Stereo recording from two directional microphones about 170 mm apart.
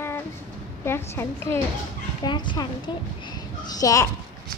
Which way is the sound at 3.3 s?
25° left (ahead or behind).